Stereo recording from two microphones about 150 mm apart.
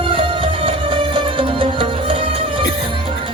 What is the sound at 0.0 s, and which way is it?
Music, 35° right (ahead or behind).